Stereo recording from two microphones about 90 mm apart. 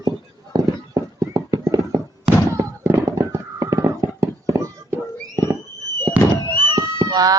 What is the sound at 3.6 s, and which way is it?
Horse, 45° right (ahead or behind).